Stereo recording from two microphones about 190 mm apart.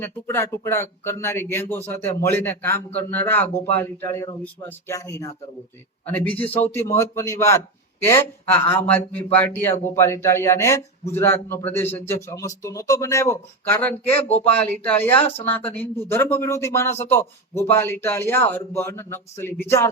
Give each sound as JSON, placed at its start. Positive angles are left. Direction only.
{"t": 0.0, "sound": "speech", "side_deg": 10}